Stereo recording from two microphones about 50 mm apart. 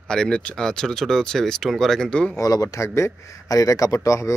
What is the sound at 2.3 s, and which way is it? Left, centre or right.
Speech, left.